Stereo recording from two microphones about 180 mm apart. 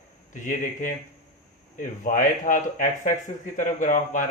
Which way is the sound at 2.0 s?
45° left (ahead or behind).